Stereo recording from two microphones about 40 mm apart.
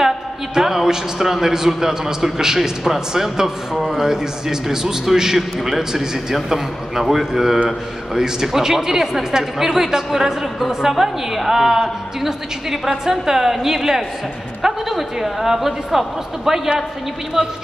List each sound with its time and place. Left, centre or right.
0.6 s a man's voice: centre
17.4 s a woman's voice: right